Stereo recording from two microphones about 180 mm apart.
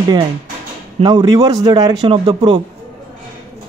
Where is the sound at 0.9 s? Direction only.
25° right (ahead or behind).